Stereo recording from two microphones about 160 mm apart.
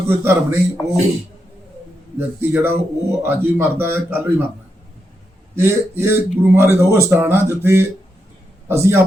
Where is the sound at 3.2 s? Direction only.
15° right (ahead or behind).